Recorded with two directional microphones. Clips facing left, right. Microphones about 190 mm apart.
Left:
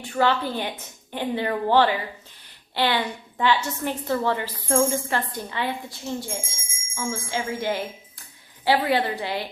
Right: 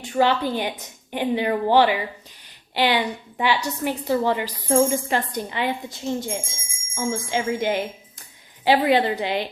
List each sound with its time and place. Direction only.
0.2 s a woman's voice: 15° right (ahead or behind)